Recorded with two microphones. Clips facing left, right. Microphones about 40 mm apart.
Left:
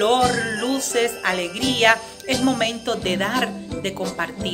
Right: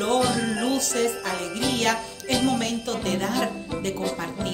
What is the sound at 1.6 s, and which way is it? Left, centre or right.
Speech, left.